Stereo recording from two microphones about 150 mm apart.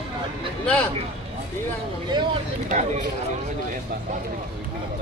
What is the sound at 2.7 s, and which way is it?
Speech, 50° right (ahead or behind).